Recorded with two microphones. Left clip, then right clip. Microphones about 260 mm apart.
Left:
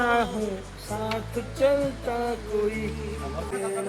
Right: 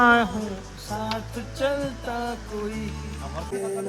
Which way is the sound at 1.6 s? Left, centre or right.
Right.